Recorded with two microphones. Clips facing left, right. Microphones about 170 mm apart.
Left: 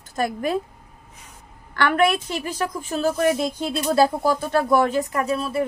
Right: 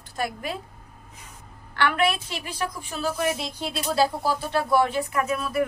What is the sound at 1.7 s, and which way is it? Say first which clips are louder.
A woman's voice: left 4 dB; 45° left (ahead or behind).